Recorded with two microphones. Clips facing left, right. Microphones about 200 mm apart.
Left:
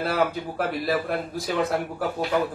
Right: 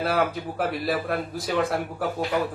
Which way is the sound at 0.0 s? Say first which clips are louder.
Even; centre (ahead or behind).